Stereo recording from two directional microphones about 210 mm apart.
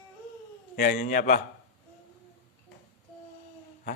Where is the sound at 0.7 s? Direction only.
40° left (ahead or behind).